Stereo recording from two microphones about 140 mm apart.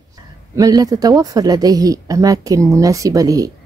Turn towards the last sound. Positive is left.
turn(degrees=-25)  # may be behind; listen again after turning